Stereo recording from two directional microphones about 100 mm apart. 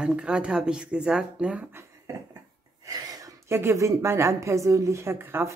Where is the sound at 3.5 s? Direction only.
25° right (ahead or behind).